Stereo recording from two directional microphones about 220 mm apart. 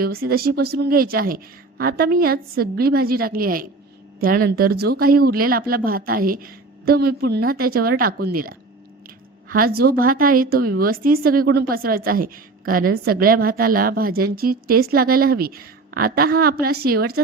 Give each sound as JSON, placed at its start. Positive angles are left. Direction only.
{"t": 0.0, "sound": "a woman's voice", "side_deg": -45}